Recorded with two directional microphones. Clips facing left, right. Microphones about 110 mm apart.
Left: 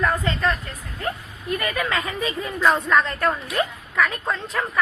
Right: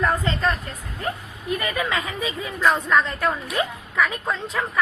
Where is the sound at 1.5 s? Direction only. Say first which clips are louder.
Left 1 dB; 15° right (ahead or behind).